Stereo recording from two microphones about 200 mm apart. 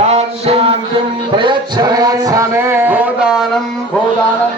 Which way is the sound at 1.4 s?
20° right (ahead or behind).